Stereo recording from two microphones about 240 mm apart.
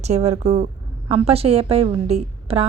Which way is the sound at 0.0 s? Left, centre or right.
Right.